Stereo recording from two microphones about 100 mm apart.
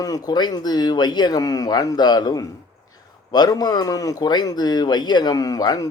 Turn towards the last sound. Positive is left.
turn(degrees=40)  # may be behind; listen again after turning